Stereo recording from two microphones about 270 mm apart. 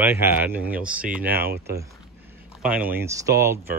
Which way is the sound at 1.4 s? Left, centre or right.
Right.